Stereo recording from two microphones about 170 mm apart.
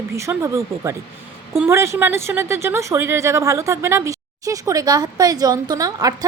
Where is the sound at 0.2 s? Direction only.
15° right (ahead or behind).